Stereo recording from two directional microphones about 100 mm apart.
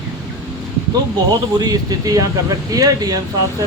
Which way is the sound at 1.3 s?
40° right (ahead or behind).